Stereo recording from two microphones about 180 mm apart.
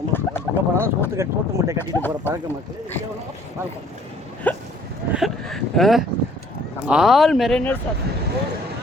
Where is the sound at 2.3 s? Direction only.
15° left (ahead or behind).